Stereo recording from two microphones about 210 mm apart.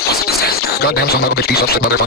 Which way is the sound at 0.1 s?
45° left (ahead or behind).